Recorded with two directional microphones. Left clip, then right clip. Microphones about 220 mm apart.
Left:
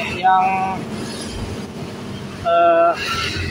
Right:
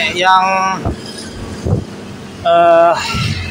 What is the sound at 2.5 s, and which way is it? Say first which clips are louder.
Speech: right 5 dB; 15° right (ahead or behind).